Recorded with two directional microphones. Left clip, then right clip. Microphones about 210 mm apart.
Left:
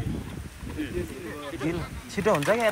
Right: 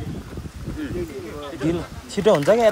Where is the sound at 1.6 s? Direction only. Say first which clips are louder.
Right 8 dB; 20° right (ahead or behind).